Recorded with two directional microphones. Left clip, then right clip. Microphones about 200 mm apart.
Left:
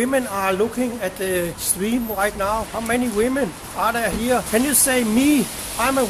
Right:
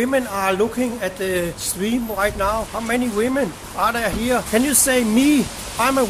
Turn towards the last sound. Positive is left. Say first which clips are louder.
# right 2 dB
turn(degrees=-10)  # may be behind; listen again after turning